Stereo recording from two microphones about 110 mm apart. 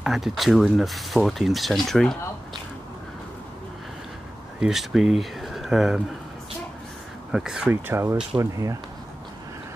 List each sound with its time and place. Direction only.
0.0 s speech: 5° right (ahead or behind)
4.6 s speech: 5° right (ahead or behind)
7.3 s speech: 5° right (ahead or behind)
7.7 s speech: 25° right (ahead or behind)